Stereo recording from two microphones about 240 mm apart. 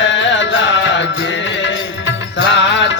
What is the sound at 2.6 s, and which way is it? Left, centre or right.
Music, left.